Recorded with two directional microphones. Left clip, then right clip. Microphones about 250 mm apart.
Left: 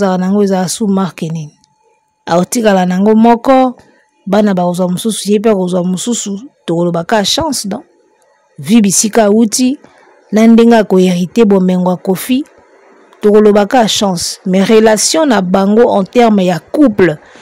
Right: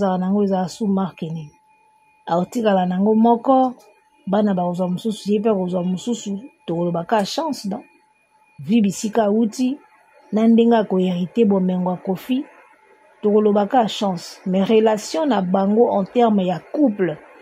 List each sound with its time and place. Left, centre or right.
0.0 s speech: left